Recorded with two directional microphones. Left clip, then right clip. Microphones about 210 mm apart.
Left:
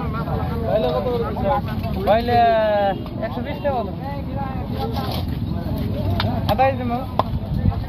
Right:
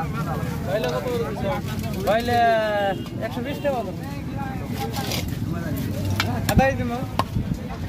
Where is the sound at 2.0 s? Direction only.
55° right (ahead or behind).